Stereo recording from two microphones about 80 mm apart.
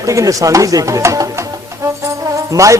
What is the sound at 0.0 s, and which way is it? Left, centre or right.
A man's voice, right.